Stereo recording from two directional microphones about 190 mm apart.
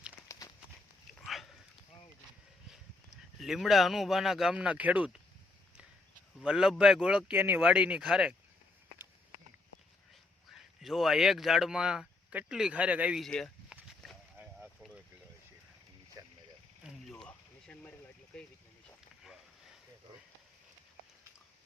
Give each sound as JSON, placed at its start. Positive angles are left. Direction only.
{"t": 0.3, "sound": "run", "side_deg": 15}
{"t": 1.2, "sound": "a sound", "side_deg": 0}
{"t": 3.4, "sound": "speech", "side_deg": 0}
{"t": 6.4, "sound": "speech", "side_deg": -5}
{"t": 10.5, "sound": "speech", "side_deg": 0}
{"t": 16.9, "sound": "a sound", "side_deg": 5}